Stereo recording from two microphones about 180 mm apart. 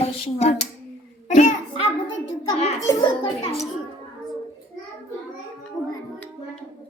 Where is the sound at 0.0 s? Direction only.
35° left (ahead or behind).